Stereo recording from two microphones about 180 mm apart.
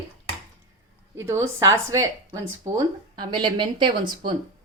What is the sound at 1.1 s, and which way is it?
Speech, 15° right (ahead or behind).